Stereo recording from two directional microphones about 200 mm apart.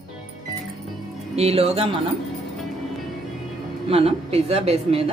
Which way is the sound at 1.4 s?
30° right (ahead or behind).